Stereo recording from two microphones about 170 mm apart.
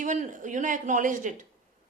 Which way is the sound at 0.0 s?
45° right (ahead or behind).